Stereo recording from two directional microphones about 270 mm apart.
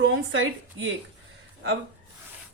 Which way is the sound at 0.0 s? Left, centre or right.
Right.